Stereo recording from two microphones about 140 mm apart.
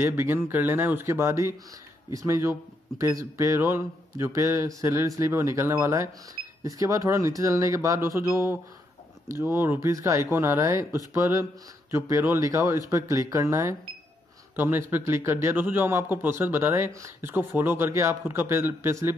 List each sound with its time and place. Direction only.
0.0 s a man's voice: 20° right (ahead or behind)